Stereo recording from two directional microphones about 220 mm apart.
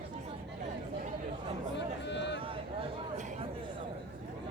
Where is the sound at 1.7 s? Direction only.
50° left (ahead or behind).